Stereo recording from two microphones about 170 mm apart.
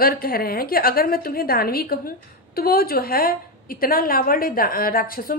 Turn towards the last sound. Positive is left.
turn(degrees=60)  # may be behind; listen again after turning